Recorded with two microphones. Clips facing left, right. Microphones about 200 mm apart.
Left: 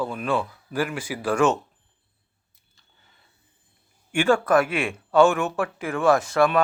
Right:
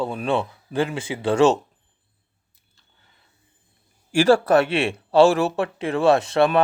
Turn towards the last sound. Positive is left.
turn(degrees=-30)  # may be behind; listen again after turning